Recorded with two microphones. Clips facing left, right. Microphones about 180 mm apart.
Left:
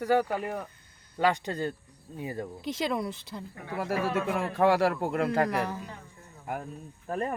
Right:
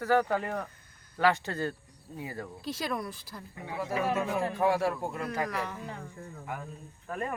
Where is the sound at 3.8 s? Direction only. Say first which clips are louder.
Left 1 dB; 70° left (ahead or behind).